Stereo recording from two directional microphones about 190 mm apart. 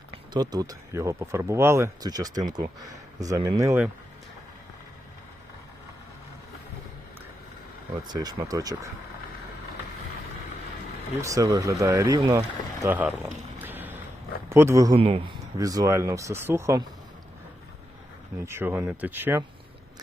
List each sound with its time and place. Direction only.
0.3 s speech: 20° right (ahead or behind)
8.0 s speech: 20° right (ahead or behind)
11.2 s speech: 15° right (ahead or behind)
14.9 s speech: 30° right (ahead or behind)
18.4 s speech: 15° right (ahead or behind)